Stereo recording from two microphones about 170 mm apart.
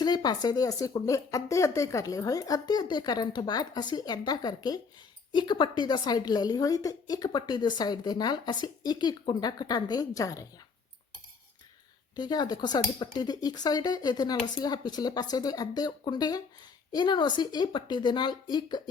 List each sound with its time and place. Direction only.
0.0 s a woman's voice: 25° left (ahead or behind)
12.1 s a woman's voice: 25° left (ahead or behind)